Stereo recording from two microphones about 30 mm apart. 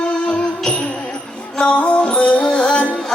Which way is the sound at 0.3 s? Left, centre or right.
Left.